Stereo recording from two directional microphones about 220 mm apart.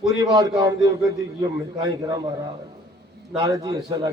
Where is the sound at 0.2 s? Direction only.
15° right (ahead or behind).